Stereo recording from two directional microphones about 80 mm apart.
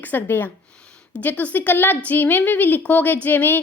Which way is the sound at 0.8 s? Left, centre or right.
Centre.